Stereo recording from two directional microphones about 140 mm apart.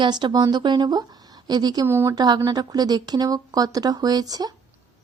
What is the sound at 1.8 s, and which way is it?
Speech, 15° right (ahead or behind).